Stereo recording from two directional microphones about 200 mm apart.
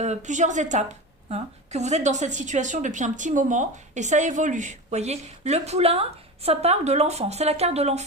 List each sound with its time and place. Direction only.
0.0 s a woman's voice: 35° right (ahead or behind)